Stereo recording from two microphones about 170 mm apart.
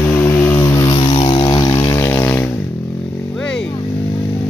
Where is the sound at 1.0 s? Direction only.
30° left (ahead or behind); by 2.5 s 15° left (ahead or behind).